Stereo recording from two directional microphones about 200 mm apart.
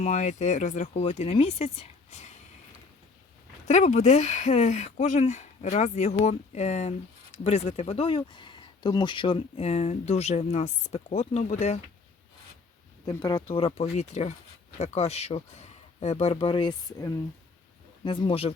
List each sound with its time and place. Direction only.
0.0 s speech: 35° left (ahead or behind)
3.7 s speech: 35° left (ahead or behind)
13.1 s speech: 15° left (ahead or behind)
13.6 s speech: 30° left (ahead or behind)